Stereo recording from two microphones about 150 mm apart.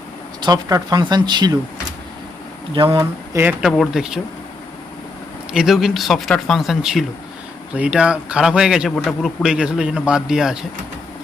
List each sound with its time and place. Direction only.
0.4 s speech: 25° right (ahead or behind)
2.7 s speech: 35° right (ahead or behind)
3.0 s speech: 15° right (ahead or behind)
3.6 s a man's voice: centre (ahead or behind)
5.5 s a man's voice: 5° right (ahead or behind)